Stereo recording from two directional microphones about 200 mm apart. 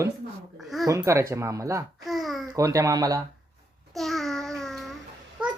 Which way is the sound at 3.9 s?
Centre (ahead or behind).